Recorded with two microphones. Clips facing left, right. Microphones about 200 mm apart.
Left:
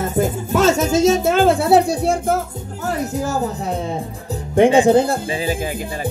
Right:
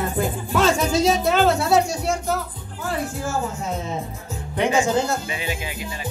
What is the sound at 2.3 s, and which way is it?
Speech, 45° left (ahead or behind).